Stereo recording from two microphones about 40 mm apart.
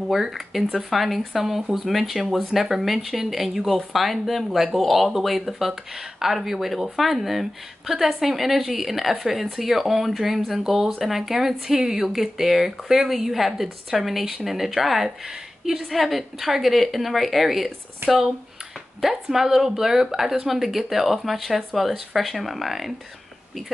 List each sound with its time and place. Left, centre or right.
0.1 s speech: centre
18.0 s speech: right
19.2 s speech: centre